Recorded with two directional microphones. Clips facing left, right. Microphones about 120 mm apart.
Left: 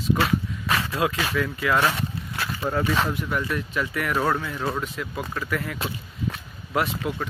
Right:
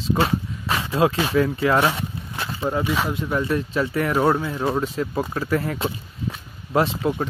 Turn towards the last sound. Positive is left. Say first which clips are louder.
# right 5 dB
turn(degrees=-25)  # may be behind; listen again after turning